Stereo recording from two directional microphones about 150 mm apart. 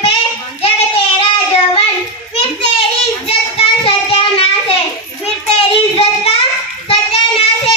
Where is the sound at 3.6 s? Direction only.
40° left (ahead or behind).